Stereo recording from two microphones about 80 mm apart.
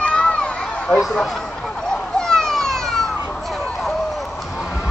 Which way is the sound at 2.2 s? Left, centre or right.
Centre.